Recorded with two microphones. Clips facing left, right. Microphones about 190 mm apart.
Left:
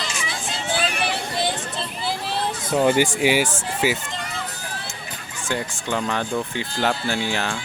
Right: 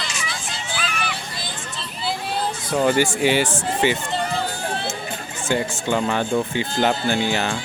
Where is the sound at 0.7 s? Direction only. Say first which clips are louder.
Left 4 dB; 65° left (ahead or behind).